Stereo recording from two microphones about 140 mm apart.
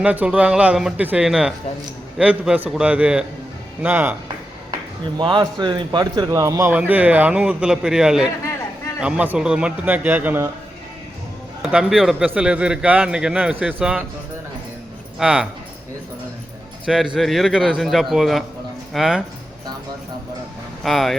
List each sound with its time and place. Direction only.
0.0 s a man's voice: 10° right (ahead or behind)
5.1 s speech: 35° right (ahead or behind)
6.7 s a man's voice: 10° right (ahead or behind)
11.6 s a man's voice: 5° right (ahead or behind)
15.2 s a man's voice: 5° right (ahead or behind)
16.8 s a man's voice: centre (ahead or behind)
20.8 s a man's voice: centre (ahead or behind)